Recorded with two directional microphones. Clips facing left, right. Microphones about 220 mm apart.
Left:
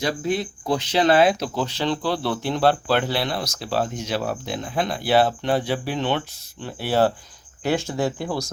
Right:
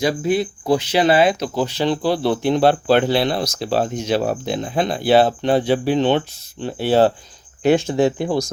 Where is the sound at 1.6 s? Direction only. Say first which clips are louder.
Right 6 dB; 10° right (ahead or behind).